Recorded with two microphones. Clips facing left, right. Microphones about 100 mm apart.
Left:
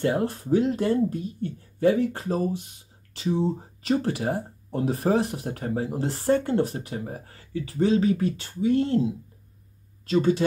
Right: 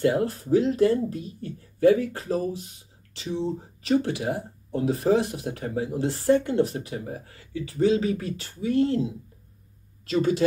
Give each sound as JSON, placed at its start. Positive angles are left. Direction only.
{"t": 0.0, "sound": "speech", "side_deg": 30}
{"t": 10.0, "sound": "speech", "side_deg": 30}